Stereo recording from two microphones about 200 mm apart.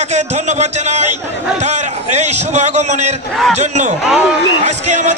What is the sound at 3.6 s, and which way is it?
Speech, 35° right (ahead or behind).